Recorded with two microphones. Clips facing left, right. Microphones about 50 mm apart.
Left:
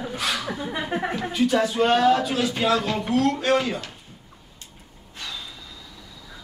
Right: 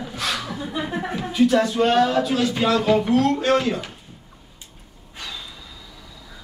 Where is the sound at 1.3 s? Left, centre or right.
Centre.